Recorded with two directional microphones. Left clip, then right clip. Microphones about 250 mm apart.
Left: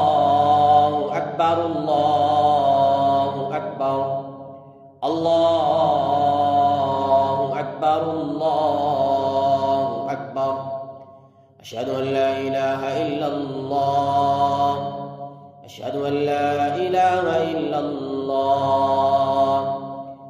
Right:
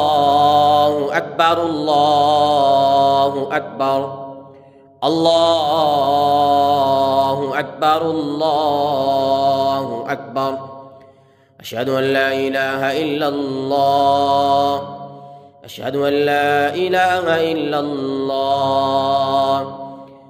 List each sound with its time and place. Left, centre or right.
0.1 s mantra: right
5.0 s mantra: right
11.7 s mantra: right
15.8 s mantra: right